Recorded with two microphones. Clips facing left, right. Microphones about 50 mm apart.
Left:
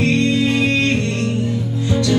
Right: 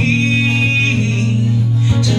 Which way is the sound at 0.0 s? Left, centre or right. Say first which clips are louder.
Even; centre.